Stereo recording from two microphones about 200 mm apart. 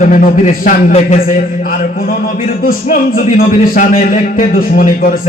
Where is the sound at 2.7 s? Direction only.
45° left (ahead or behind).